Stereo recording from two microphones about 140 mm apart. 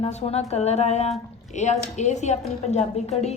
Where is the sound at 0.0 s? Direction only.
45° left (ahead or behind).